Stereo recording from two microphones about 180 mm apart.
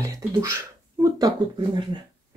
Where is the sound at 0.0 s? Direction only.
20° right (ahead or behind).